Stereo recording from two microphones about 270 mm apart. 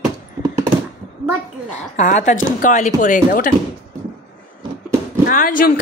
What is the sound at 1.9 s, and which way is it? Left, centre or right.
Speech, left.